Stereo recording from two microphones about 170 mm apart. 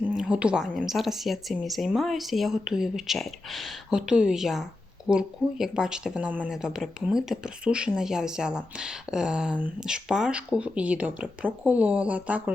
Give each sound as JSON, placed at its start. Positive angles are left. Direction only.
{"t": 0.0, "sound": "a woman's voice", "side_deg": -5}